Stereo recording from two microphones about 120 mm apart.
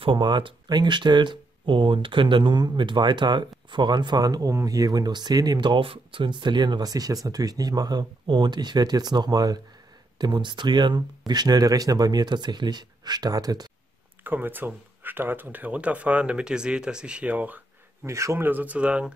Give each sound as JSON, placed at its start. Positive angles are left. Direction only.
{"t": 0.0, "sound": "speech", "side_deg": -40}
{"t": 14.2, "sound": "speech", "side_deg": -15}
{"t": 18.0, "sound": "speech", "side_deg": -25}